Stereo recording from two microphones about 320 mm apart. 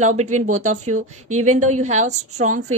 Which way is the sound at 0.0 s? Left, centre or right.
Right.